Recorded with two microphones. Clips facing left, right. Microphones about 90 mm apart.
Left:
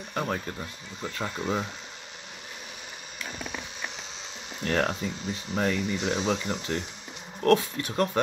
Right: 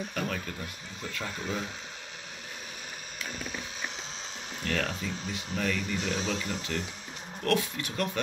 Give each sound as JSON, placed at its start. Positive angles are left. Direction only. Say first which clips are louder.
{"t": 0.1, "sound": "speech", "louder": "left 3 dB", "side_deg": 30}
{"t": 4.6, "sound": "speech", "louder": "left 5 dB", "side_deg": 40}
{"t": 5.8, "sound": "speech", "louder": "left 4 dB", "side_deg": -45}
{"t": 6.5, "sound": "speech", "louder": "left 3 dB", "side_deg": 35}